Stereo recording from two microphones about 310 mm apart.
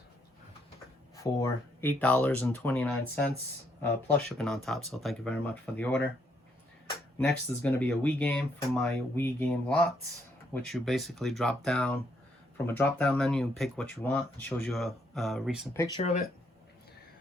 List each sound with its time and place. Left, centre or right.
1.1 s speech: centre
7.2 s speech: centre
16.0 s speech: left